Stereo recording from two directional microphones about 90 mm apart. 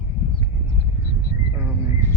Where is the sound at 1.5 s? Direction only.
20° right (ahead or behind).